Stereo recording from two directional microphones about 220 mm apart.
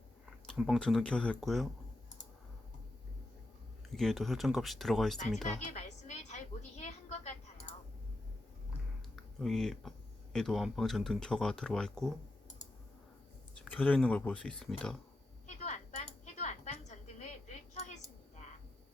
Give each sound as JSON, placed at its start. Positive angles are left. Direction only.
{"t": 0.4, "sound": "speech", "side_deg": 0}
{"t": 3.8, "sound": "speech", "side_deg": 0}
{"t": 5.5, "sound": "a sound", "side_deg": 30}
{"t": 9.1, "sound": "speech", "side_deg": 0}
{"t": 13.7, "sound": "speech", "side_deg": 5}
{"t": 15.4, "sound": "a sound", "side_deg": 30}